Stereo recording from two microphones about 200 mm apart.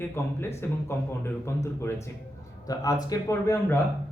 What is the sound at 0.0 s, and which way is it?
Speech, 10° left (ahead or behind).